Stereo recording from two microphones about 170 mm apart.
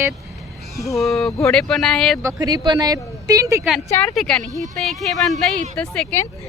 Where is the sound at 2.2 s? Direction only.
20° right (ahead or behind).